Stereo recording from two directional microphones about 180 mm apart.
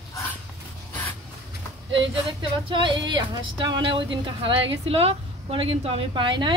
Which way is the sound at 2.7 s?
25° right (ahead or behind).